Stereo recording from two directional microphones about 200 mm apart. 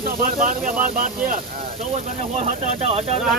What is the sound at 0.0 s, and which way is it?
Speech, 45° right (ahead or behind).